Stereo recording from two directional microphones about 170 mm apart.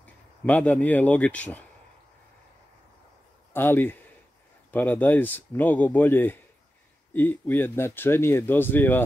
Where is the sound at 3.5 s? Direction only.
10° left (ahead or behind).